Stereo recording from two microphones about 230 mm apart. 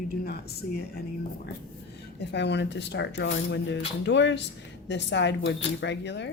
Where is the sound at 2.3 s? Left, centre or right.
Left.